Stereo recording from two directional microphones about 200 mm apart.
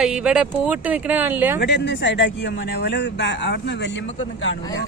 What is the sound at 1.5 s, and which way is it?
Speech, 55° left (ahead or behind).